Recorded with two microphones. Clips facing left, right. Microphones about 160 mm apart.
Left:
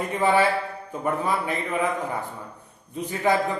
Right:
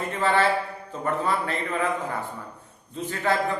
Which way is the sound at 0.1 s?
15° left (ahead or behind).